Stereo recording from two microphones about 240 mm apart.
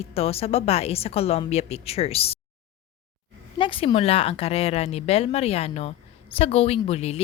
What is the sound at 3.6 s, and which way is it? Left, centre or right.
A woman's voice, left.